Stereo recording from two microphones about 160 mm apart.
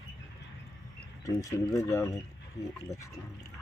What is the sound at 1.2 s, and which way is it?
Speech, 20° left (ahead or behind).